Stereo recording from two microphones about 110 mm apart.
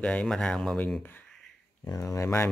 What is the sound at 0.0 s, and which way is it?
Speech, 10° left (ahead or behind).